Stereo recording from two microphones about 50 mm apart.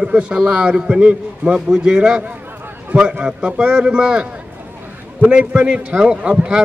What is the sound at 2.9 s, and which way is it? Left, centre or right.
Speech, right.